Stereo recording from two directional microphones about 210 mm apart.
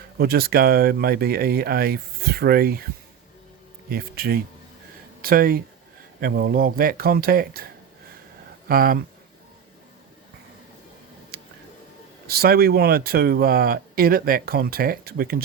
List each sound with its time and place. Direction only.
0.2 s speech: 50° right (ahead or behind)
3.8 s speech: 45° right (ahead or behind)
11.3 s music: 45° right (ahead or behind)
12.3 s speech: 45° right (ahead or behind)